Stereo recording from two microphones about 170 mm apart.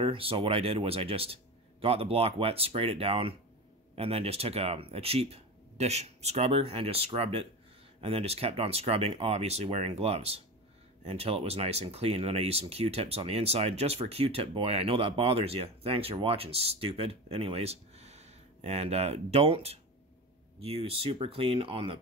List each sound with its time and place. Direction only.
0.0 s speech: 35° right (ahead or behind)